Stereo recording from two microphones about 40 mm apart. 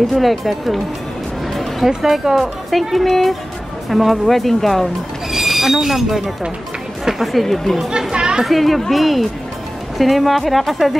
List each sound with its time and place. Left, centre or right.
0.0 s speech: centre
1.5 s music: centre
1.9 s speech: centre
5.3 s speech: centre
7.3 s speech: centre
8.1 s a woman's voice: right
8.5 s speech: centre